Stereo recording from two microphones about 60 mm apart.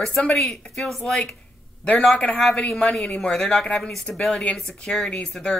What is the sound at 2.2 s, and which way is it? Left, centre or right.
Speech, centre.